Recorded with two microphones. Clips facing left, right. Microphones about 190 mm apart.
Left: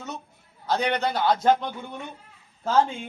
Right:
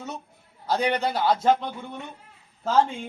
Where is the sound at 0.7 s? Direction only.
10° right (ahead or behind).